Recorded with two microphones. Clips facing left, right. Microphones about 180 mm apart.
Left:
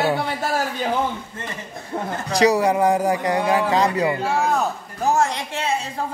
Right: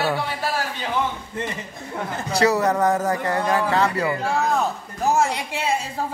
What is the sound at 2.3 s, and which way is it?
Speech, 15° left (ahead or behind).